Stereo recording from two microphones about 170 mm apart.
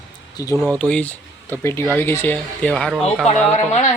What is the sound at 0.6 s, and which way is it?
Speech, 5° left (ahead or behind).